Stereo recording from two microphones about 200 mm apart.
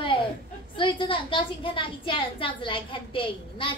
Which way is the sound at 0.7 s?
25° left (ahead or behind).